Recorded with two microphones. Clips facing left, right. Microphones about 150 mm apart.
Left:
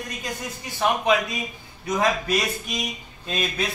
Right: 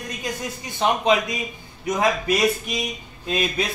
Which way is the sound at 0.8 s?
20° right (ahead or behind).